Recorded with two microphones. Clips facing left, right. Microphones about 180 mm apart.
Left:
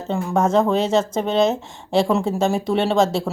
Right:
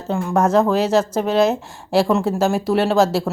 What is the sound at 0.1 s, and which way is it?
A woman's voice, 5° right (ahead or behind).